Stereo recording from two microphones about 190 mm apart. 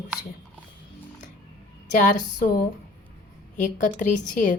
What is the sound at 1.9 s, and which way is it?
A woman's voice, 40° left (ahead or behind).